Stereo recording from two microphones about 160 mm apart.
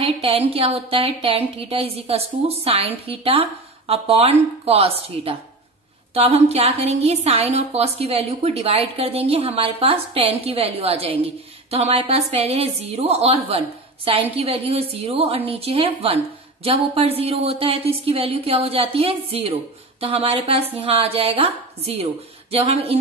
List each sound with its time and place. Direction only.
0.0 s a woman's voice: 35° right (ahead or behind)